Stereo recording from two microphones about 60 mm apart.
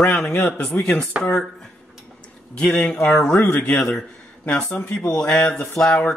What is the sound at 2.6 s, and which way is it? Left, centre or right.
Speech, left.